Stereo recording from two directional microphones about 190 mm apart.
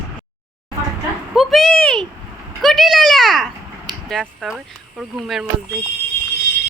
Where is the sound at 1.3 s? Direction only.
Centre (ahead or behind).